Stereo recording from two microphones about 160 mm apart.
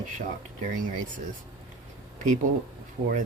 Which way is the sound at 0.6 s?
55° right (ahead or behind).